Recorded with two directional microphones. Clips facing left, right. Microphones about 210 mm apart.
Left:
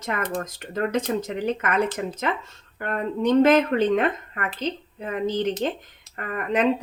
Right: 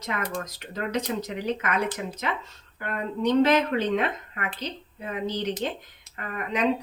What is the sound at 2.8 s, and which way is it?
Speech, 50° left (ahead or behind).